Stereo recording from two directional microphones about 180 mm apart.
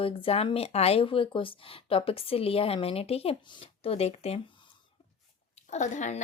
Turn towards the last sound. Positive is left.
turn(degrees=40)  # may be behind; listen again after turning